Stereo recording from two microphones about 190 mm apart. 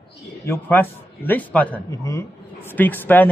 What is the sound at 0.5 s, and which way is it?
Speech, 10° left (ahead or behind).